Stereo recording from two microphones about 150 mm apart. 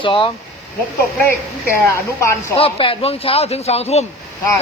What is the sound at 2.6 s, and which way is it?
Speech, 40° left (ahead or behind).